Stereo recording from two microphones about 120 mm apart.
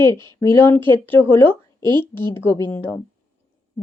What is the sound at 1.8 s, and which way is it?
Speech, 40° right (ahead or behind).